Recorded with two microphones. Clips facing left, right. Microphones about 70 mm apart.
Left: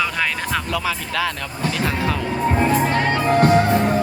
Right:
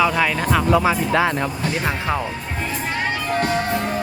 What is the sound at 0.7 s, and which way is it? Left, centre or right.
Speech, right.